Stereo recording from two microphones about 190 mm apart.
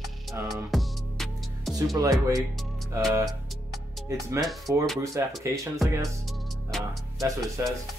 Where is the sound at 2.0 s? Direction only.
20° right (ahead or behind).